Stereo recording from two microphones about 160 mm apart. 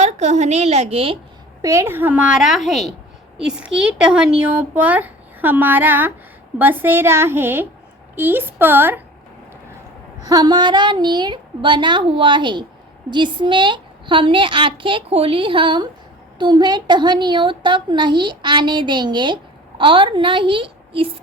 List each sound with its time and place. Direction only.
0.0 s a woman's voice: 45° right (ahead or behind)
1.6 s speech: 15° right (ahead or behind)
10.2 s a woman's voice: 25° right (ahead or behind)